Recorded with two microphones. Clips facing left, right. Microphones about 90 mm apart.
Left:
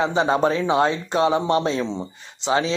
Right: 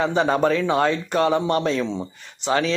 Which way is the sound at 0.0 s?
25° left (ahead or behind).